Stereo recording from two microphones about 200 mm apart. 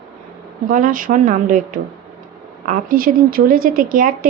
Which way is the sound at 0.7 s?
45° right (ahead or behind).